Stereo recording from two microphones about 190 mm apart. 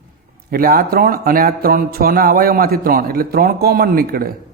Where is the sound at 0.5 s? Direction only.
50° right (ahead or behind).